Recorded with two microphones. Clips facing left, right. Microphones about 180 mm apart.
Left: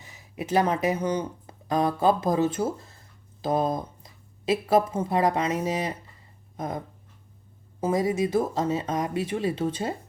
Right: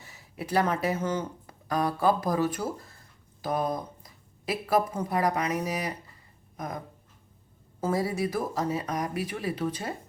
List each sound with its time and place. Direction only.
0.0 s speech: 20° left (ahead or behind)